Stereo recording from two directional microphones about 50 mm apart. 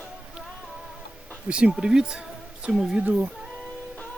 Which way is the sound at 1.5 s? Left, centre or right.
Right.